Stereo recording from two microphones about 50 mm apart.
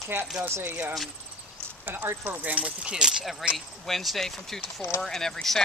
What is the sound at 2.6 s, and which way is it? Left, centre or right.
Speech, right.